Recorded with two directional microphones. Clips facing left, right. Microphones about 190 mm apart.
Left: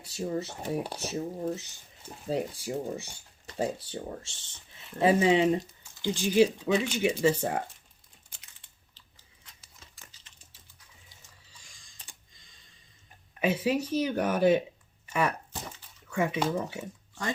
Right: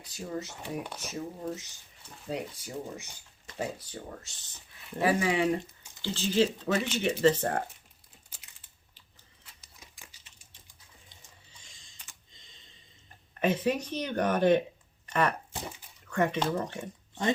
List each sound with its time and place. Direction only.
0.0 s speech: 30° left (ahead or behind)
6.7 s speech: 5° right (ahead or behind)
6.9 s speech: 10° left (ahead or behind)
9.0 s a sound: 5° right (ahead or behind)
9.8 s dog: 15° right (ahead or behind)
11.6 s typing: 25° right (ahead or behind)
12.3 s computer keyboard: 25° right (ahead or behind)
13.4 s speech: 10° left (ahead or behind)